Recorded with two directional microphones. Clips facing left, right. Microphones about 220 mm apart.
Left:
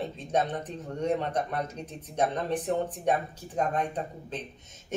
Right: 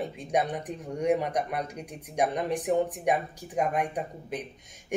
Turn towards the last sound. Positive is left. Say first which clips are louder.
# right 2 dB
turn(degrees=-15)  # may be behind; listen again after turning